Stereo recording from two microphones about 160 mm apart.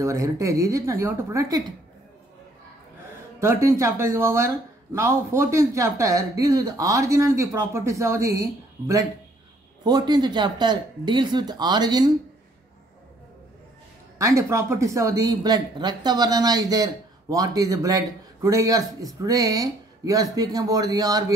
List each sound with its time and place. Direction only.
0.0 s speech: 20° right (ahead or behind)
3.3 s speech: 20° right (ahead or behind)
14.1 s speech: 20° right (ahead or behind)